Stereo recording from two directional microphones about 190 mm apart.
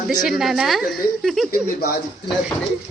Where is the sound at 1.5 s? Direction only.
55° left (ahead or behind).